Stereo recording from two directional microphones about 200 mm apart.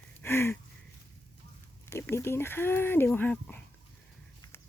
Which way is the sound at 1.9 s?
10° left (ahead or behind).